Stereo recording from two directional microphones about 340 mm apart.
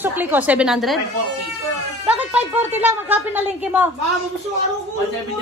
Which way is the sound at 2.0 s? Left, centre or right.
Centre.